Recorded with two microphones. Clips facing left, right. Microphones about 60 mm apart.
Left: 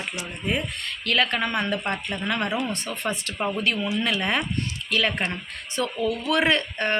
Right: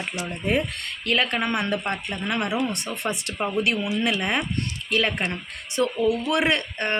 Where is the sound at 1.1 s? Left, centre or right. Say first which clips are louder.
Even; right.